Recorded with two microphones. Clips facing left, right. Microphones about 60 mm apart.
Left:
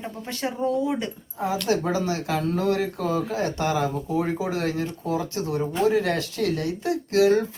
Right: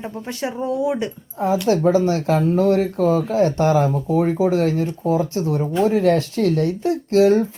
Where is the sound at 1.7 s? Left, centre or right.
Right.